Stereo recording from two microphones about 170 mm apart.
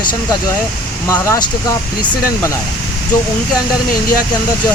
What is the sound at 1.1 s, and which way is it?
Speech, 15° left (ahead or behind).